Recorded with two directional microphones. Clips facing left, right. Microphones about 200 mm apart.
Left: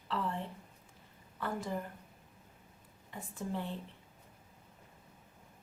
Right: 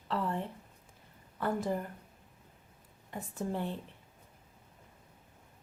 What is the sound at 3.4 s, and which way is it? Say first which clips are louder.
Speech: right 3 dB; 50° right (ahead or behind).